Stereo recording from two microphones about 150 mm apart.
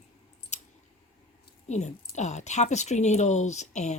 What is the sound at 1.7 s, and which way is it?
Speech, 50° left (ahead or behind).